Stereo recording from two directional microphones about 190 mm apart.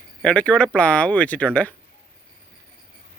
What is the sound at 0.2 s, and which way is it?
Speech, 5° left (ahead or behind).